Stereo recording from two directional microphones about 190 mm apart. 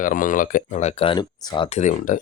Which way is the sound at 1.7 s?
40° left (ahead or behind).